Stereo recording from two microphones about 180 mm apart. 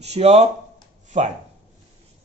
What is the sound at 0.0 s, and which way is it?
Speech, 35° right (ahead or behind).